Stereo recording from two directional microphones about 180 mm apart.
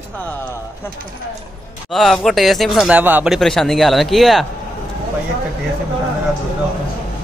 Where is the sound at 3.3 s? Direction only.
Centre (ahead or behind).